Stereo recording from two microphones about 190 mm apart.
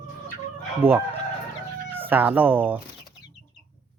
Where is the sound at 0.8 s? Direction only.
10° right (ahead or behind).